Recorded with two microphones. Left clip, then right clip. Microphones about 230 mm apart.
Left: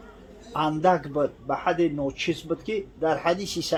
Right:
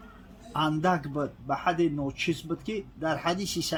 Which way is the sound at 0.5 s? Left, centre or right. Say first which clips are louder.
Left 4 dB; right.